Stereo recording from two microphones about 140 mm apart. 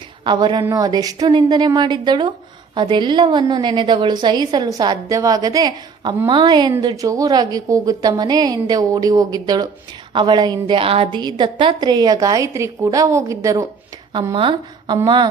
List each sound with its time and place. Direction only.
0.3 s a woman's voice: 30° right (ahead or behind)
11.2 s a woman's voice: 30° right (ahead or behind)
14.3 s a woman's voice: 35° right (ahead or behind)